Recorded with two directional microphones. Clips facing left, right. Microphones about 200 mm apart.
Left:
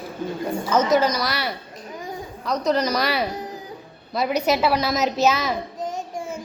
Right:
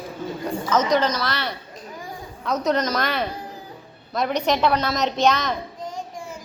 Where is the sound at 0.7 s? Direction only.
10° left (ahead or behind).